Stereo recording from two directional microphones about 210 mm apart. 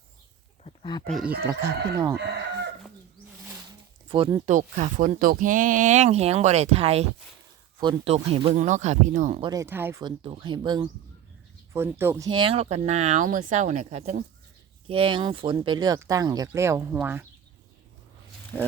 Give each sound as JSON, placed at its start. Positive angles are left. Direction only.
{"t": 0.6, "sound": "a sound", "side_deg": 25}
{"t": 1.0, "sound": "speech", "side_deg": 0}
{"t": 1.5, "sound": "speech", "side_deg": -15}
{"t": 4.1, "sound": "speech", "side_deg": -25}
{"t": 4.5, "sound": "speech", "side_deg": -35}
{"t": 9.4, "sound": "speech", "side_deg": -15}
{"t": 12.3, "sound": "speech", "side_deg": -25}
{"t": 18.5, "sound": "speech", "side_deg": 5}